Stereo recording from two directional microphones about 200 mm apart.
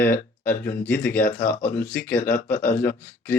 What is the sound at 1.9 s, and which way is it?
Speech, 10° left (ahead or behind).